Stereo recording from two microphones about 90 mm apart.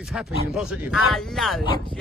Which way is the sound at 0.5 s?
Centre (ahead or behind).